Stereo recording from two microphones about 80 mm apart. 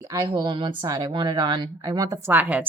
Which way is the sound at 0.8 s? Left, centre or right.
Right.